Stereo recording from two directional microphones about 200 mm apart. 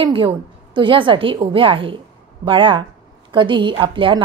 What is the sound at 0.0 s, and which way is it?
A woman's voice, 25° right (ahead or behind).